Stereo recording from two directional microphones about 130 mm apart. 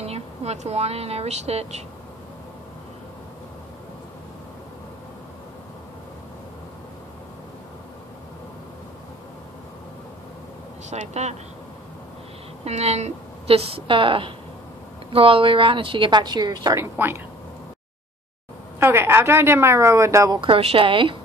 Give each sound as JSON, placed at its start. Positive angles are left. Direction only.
{"t": 0.0, "sound": "speech", "side_deg": -55}
{"t": 10.9, "sound": "speech", "side_deg": -60}
{"t": 12.6, "sound": "a woman's voice", "side_deg": -55}
{"t": 16.7, "sound": "speech", "side_deg": -15}
{"t": 18.8, "sound": "speech", "side_deg": -15}
{"t": 20.3, "sound": "a woman's voice", "side_deg": -45}